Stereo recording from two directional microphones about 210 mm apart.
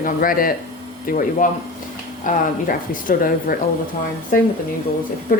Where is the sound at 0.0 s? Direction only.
40° left (ahead or behind).